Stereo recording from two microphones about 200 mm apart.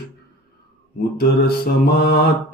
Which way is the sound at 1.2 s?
50° left (ahead or behind).